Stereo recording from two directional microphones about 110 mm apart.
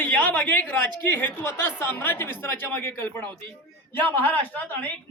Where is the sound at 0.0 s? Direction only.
15° left (ahead or behind).